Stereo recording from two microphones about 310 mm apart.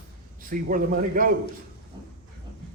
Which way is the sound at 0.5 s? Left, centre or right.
Right.